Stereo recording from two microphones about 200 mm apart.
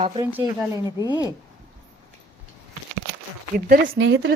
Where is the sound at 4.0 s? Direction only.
60° right (ahead or behind).